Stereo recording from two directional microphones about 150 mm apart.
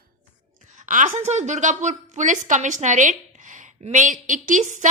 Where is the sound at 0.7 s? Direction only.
60° right (ahead or behind).